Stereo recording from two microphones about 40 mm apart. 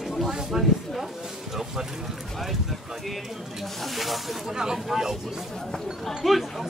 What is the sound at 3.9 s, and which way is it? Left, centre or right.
Speech, centre.